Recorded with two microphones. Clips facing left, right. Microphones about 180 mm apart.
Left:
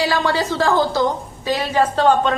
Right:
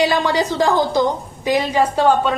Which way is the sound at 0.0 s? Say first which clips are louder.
Right 2 dB; 20° right (ahead or behind).